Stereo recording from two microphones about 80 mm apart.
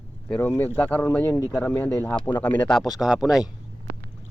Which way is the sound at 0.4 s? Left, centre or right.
Left.